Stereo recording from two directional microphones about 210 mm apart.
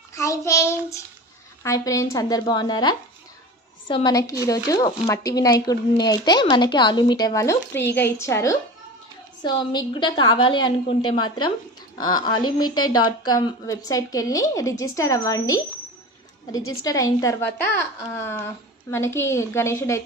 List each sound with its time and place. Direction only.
0.1 s child singing: 15° left (ahead or behind)
1.6 s a woman's voice: 15° left (ahead or behind)
12.6 s speech: 90° left
13.2 s speech: 20° left (ahead or behind)
16.8 s speech: 15° left (ahead or behind)